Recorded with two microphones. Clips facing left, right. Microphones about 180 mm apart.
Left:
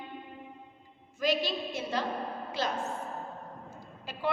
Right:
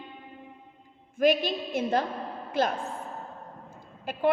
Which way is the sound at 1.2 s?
55° right (ahead or behind).